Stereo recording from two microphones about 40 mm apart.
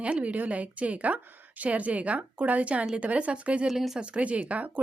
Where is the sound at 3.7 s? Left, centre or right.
Centre.